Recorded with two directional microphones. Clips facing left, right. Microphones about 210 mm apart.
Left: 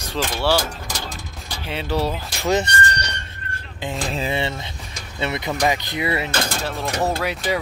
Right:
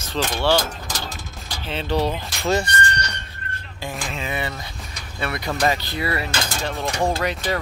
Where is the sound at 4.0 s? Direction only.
35° left (ahead or behind).